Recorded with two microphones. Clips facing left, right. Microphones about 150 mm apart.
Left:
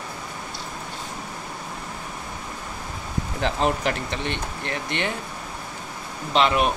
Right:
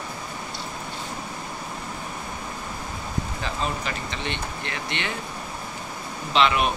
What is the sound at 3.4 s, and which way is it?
Speech, 70° left (ahead or behind).